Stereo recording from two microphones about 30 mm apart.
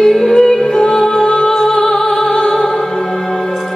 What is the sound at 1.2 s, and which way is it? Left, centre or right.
Music, left.